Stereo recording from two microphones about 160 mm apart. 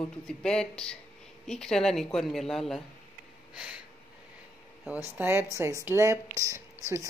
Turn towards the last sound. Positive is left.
turn(degrees=-20)  # may be behind; listen again after turning